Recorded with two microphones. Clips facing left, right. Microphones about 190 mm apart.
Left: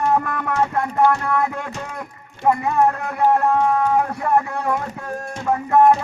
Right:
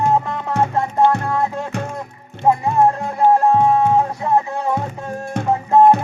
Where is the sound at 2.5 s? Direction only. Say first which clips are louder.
Right 2 dB; 25° right (ahead or behind).